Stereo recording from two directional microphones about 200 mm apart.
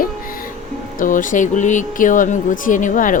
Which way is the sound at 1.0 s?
40° left (ahead or behind).